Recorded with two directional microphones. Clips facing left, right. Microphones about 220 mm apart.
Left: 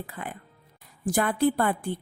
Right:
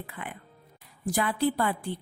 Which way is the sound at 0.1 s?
40° left (ahead or behind).